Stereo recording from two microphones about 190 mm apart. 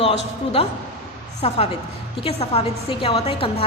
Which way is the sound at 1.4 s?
30° left (ahead or behind).